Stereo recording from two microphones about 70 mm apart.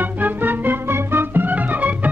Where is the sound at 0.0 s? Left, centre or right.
Right.